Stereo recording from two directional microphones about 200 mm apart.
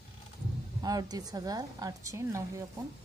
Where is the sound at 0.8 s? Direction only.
20° right (ahead or behind).